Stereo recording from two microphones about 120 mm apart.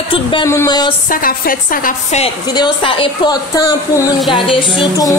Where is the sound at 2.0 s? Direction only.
65° left (ahead or behind).